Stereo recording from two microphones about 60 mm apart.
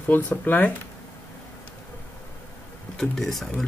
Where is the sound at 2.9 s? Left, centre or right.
Centre.